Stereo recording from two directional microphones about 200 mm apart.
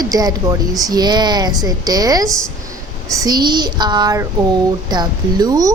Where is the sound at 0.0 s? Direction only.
20° right (ahead or behind).